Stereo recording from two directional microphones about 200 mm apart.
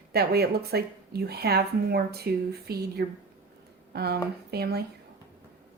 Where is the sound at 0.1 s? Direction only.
50° right (ahead or behind).